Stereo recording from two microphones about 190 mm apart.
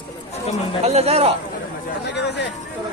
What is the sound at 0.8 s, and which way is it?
Speech, 35° right (ahead or behind).